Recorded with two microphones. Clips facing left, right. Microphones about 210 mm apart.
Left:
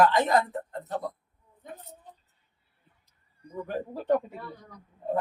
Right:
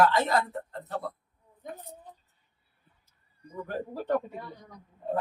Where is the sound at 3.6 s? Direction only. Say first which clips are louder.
Left 4 dB; 20° left (ahead or behind).